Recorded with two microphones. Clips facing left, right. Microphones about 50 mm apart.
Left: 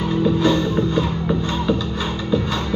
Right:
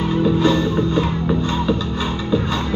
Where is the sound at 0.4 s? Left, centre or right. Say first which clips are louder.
Right 1 dB; centre.